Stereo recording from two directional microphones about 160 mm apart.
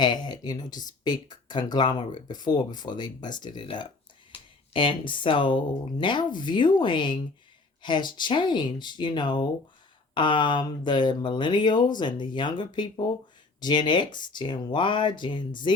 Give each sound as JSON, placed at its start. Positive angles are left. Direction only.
{"t": 0.0, "sound": "speech", "side_deg": 25}